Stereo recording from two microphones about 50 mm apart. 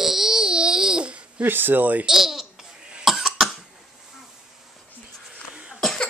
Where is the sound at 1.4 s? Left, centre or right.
Right.